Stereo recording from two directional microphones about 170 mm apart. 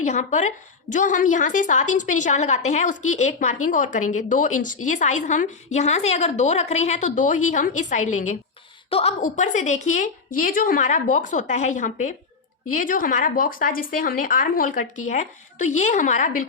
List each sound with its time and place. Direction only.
0.0 s a woman's voice: 45° left (ahead or behind)